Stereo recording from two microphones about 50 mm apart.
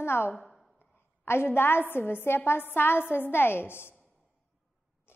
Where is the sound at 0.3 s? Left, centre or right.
Centre.